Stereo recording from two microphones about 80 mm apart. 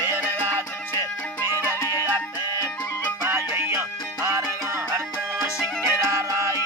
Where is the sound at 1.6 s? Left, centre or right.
Right.